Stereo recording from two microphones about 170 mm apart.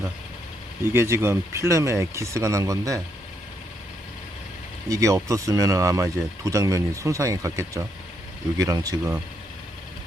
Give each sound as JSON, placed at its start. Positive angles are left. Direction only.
{"t": 0.9, "sound": "speech", "side_deg": -15}
{"t": 4.9, "sound": "speech", "side_deg": -20}